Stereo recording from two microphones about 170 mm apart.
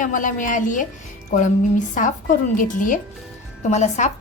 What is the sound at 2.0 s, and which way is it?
A woman's voice, 50° left (ahead or behind).